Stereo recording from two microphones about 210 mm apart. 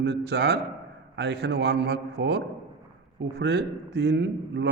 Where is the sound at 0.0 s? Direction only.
55° right (ahead or behind).